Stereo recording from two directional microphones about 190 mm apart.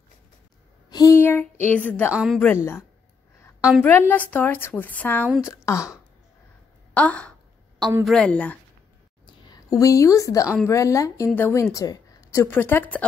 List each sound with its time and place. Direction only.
0.8 s speech: 20° left (ahead or behind)
2.0 s a woman's voice: 5° right (ahead or behind); by 2.8 s 10° left (ahead or behind)
3.8 s a woman's voice: 10° left (ahead or behind)
6.9 s a sound: 5° left (ahead or behind)
8.0 s a woman's voice: 5° left (ahead or behind)
9.2 s a sound: 20° left (ahead or behind)
10.7 s a woman's voice: 15° left (ahead or behind)